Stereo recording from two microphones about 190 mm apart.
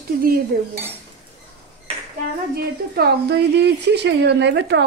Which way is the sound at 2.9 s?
60° right (ahead or behind).